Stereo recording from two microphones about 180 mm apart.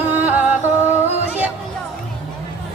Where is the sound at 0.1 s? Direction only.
10° right (ahead or behind).